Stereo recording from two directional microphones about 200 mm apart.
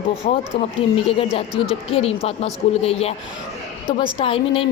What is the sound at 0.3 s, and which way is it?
Speech, 25° left (ahead or behind).